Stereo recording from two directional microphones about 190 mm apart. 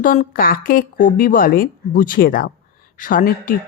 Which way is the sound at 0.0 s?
45° left (ahead or behind).